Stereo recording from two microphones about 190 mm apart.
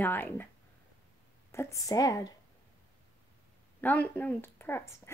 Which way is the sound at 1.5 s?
15° left (ahead or behind).